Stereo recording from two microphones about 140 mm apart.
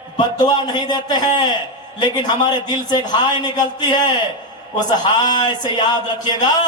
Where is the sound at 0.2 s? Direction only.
30° left (ahead or behind).